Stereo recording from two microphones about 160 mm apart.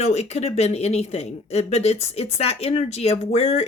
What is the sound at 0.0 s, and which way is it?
Speech, 45° left (ahead or behind).